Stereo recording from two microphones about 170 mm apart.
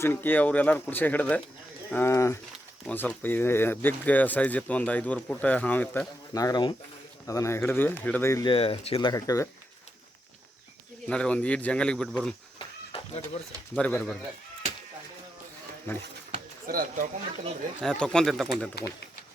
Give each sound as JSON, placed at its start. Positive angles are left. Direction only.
{"t": 0.0, "sound": "speech", "side_deg": 10}
{"t": 6.3, "sound": "speech", "side_deg": 20}
{"t": 8.4, "sound": "speech", "side_deg": 30}
{"t": 11.1, "sound": "speech", "side_deg": 5}
{"t": 12.5, "sound": "a sound", "side_deg": 35}
{"t": 13.7, "sound": "speech", "side_deg": 5}
{"t": 15.9, "sound": "speech", "side_deg": 15}
{"t": 16.3, "sound": "a sound", "side_deg": -55}
{"t": 17.8, "sound": "speech", "side_deg": 5}
{"t": 18.7, "sound": "speech", "side_deg": 70}